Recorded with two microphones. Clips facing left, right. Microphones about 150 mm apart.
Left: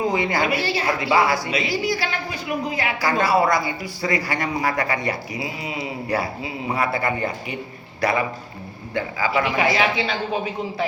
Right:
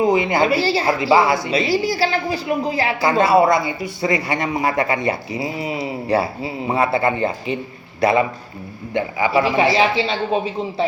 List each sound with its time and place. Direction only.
0.0 s a woman's voice: 20° right (ahead or behind)